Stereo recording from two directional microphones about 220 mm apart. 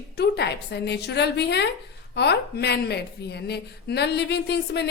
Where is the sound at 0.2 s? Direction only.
50° left (ahead or behind).